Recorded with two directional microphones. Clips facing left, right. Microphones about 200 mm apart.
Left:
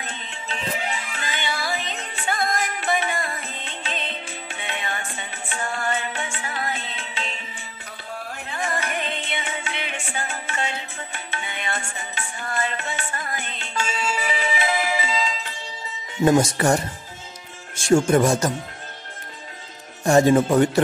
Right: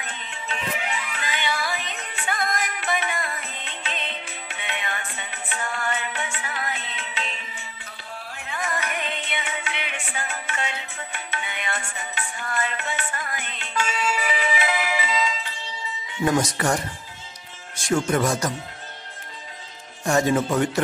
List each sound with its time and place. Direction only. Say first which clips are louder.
0.0 s music: left 1 dB; 30° left (ahead or behind)
8.5 s music: left 1 dB; 30° left (ahead or behind)
16.3 s speech: left 4 dB; 30° left (ahead or behind)
20.1 s speech: left 5 dB; 30° left (ahead or behind)